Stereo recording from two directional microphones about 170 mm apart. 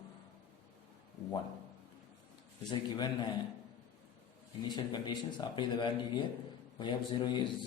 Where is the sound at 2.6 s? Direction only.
25° left (ahead or behind).